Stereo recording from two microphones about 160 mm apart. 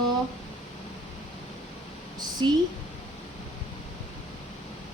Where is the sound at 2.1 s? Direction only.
25° right (ahead or behind).